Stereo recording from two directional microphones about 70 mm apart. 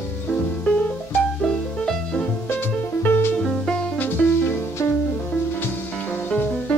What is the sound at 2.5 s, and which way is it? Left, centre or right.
Music, left.